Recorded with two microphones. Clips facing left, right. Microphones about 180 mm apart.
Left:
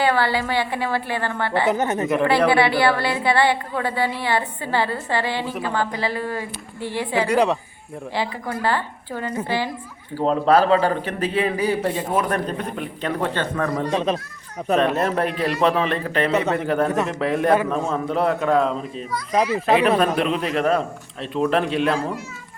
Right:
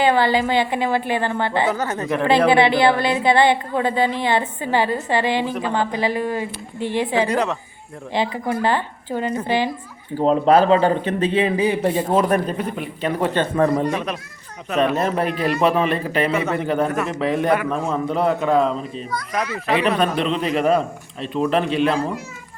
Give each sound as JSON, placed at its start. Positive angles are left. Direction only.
{"t": 0.0, "sound": "speech", "side_deg": -20}
{"t": 1.7, "sound": "a woman's voice", "side_deg": 20}
{"t": 2.5, "sound": "a woman's voice", "side_deg": -20}
{"t": 7.2, "sound": "a woman's voice", "side_deg": 10}
{"t": 8.1, "sound": "speech", "side_deg": -20}
{"t": 12.5, "sound": "a woman's voice", "side_deg": -5}
{"t": 13.9, "sound": "a woman's voice", "side_deg": 25}
{"t": 14.8, "sound": "a man's voice", "side_deg": 0}
{"t": 19.3, "sound": "a woman's voice", "side_deg": 30}
{"t": 20.0, "sound": "a man's voice", "side_deg": 5}